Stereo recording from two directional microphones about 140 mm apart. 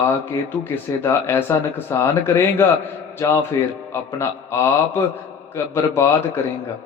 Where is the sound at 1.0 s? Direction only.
15° left (ahead or behind).